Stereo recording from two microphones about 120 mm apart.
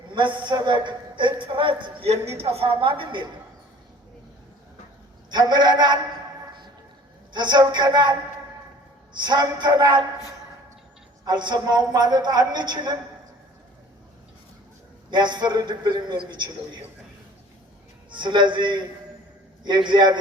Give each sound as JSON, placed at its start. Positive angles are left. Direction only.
{"t": 0.1, "sound": "a man's voice", "side_deg": -40}
{"t": 2.0, "sound": "a woman's voice", "side_deg": -60}
{"t": 5.3, "sound": "a man's voice", "side_deg": -35}
{"t": 7.3, "sound": "a man's voice", "side_deg": -40}
{"t": 9.1, "sound": "a man's voice", "side_deg": -40}
{"t": 11.3, "sound": "a man's voice", "side_deg": -35}
{"t": 15.1, "sound": "a man's voice", "side_deg": -40}
{"t": 18.1, "sound": "a man's voice", "side_deg": -40}